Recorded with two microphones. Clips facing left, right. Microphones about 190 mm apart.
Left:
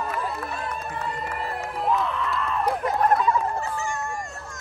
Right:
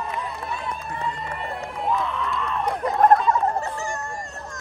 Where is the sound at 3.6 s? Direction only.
40° right (ahead or behind).